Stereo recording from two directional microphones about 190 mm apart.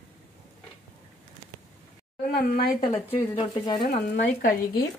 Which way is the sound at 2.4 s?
50° left (ahead or behind).